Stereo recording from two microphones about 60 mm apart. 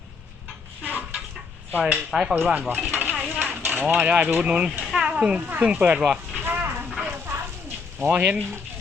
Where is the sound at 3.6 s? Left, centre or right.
Right.